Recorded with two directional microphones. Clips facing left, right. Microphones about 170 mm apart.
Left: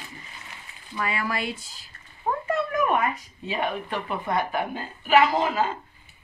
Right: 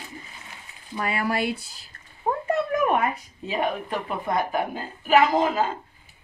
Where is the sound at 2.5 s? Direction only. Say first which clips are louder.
Right 2 dB; 35° right (ahead or behind).